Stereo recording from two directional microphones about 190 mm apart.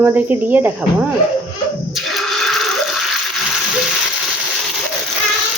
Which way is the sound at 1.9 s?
Centre (ahead or behind).